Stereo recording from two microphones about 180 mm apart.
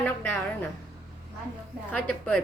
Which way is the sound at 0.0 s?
10° left (ahead or behind).